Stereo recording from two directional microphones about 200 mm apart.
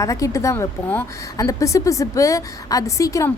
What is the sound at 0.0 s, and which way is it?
A woman's voice, 15° left (ahead or behind).